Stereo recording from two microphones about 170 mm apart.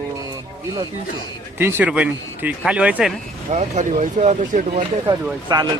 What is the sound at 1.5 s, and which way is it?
Speech, 15° right (ahead or behind).